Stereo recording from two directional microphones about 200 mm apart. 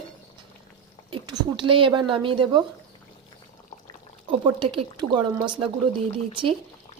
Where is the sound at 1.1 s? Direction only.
25° right (ahead or behind).